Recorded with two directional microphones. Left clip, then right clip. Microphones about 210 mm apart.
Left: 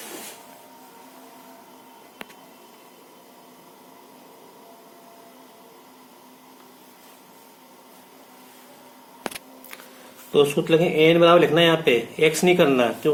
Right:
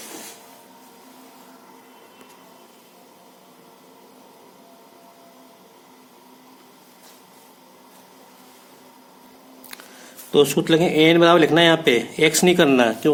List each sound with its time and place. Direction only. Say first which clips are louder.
10.3 s speech: right 2 dB; 40° right (ahead or behind)